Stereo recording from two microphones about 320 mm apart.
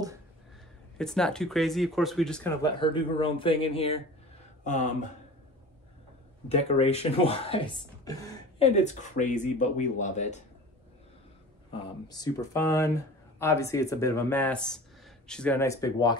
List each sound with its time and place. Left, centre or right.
0.9 s speech: centre; by 5.1 s left
6.5 s speech: centre
11.7 s speech: centre